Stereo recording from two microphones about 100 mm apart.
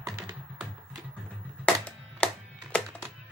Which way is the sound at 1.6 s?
10° left (ahead or behind).